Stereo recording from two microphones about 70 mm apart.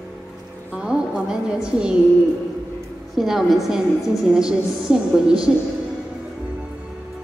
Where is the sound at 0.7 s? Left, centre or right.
Centre.